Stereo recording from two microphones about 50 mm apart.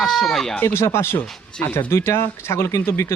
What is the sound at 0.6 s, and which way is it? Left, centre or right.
Speech, left.